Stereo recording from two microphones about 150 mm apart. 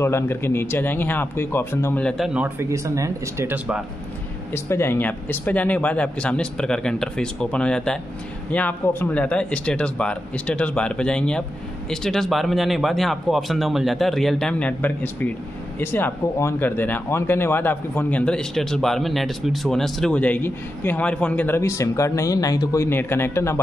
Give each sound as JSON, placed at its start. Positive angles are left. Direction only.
{"t": 0.0, "sound": "speech", "side_deg": 15}
{"t": 2.0, "sound": "speech", "side_deg": 0}
{"t": 4.6, "sound": "speech", "side_deg": 15}